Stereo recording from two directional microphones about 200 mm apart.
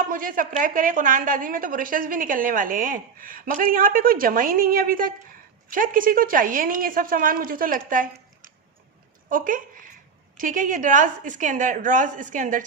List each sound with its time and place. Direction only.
0.0 s a woman's voice: 45° right (ahead or behind)